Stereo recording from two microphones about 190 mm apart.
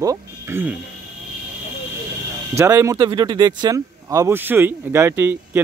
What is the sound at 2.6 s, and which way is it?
Speech, 15° right (ahead or behind).